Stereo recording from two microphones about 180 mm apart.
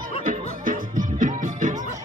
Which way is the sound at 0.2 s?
50° right (ahead or behind).